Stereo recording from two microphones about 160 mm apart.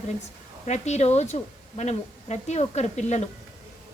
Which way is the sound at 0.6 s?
45° left (ahead or behind).